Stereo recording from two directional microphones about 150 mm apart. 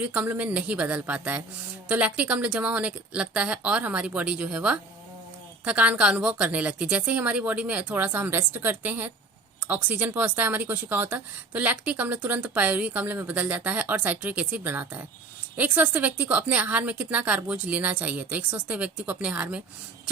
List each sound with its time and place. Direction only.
0.0 s speech: 10° right (ahead or behind)